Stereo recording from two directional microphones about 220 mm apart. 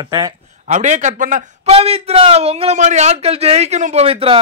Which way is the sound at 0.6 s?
35° right (ahead or behind).